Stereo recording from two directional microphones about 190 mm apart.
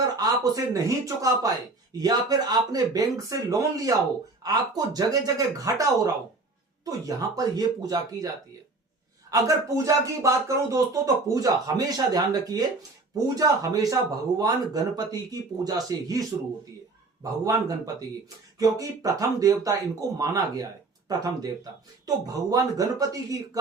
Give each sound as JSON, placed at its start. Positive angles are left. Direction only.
{"t": 0.2, "sound": "speech", "side_deg": -20}
{"t": 9.3, "sound": "speech", "side_deg": -15}
{"t": 17.4, "sound": "speech", "side_deg": -20}